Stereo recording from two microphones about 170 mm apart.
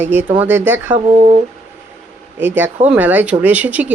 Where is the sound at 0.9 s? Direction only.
45° right (ahead or behind).